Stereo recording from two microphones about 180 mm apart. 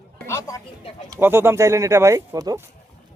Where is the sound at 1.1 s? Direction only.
15° right (ahead or behind).